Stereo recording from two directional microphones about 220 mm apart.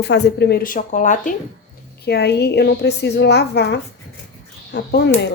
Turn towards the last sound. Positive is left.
turn(degrees=50)  # may be behind; listen again after turning